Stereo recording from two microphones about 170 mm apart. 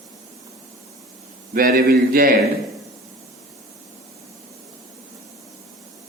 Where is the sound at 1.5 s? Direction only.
55° right (ahead or behind).